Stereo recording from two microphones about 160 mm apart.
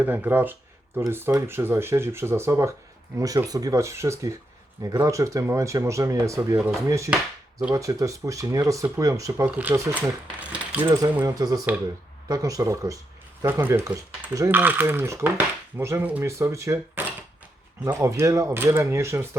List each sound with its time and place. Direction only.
0.0 s speech: 10° right (ahead or behind)